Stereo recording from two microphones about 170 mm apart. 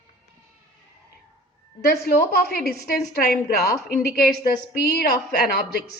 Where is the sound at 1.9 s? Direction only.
65° left (ahead or behind).